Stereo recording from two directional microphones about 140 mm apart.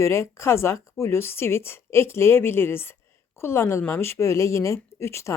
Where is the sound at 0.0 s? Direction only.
20° left (ahead or behind).